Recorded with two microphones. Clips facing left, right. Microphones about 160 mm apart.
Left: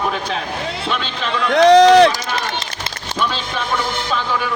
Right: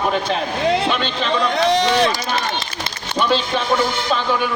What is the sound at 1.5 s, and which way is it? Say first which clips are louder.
Speech: left 11 dB; 90° left.